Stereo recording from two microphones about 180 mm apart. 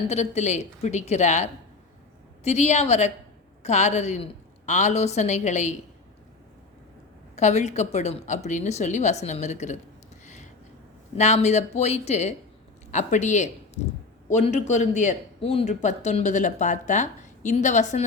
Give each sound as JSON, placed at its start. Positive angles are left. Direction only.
{"t": 0.1, "sound": "a man's voice", "side_deg": 40}
{"t": 7.3, "sound": "a man's voice", "side_deg": 40}
{"t": 10.2, "sound": "a sound", "side_deg": 40}
{"t": 11.2, "sound": "a man's voice", "side_deg": 40}